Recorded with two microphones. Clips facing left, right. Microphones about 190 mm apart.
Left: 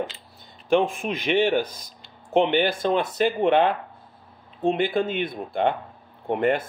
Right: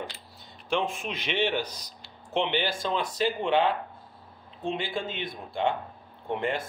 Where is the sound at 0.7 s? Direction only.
55° left (ahead or behind).